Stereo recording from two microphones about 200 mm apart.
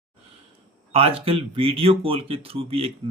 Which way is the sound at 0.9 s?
30° right (ahead or behind).